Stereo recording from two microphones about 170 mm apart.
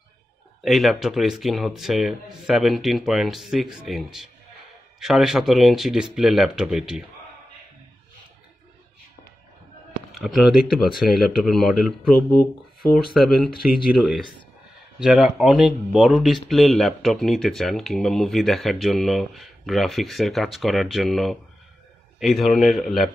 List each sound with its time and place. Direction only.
0.6 s speech: centre (ahead or behind)
10.1 s speech: centre (ahead or behind)
13.5 s speech: 60° left (ahead or behind)
13.9 s speech: 5° right (ahead or behind)